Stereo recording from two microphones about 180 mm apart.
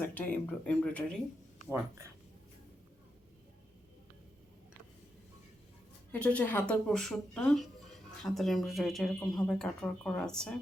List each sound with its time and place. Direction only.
0.0 s speech: 10° left (ahead or behind)
6.1 s speech: 5° left (ahead or behind)